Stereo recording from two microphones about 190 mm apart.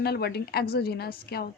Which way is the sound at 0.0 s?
55° left (ahead or behind).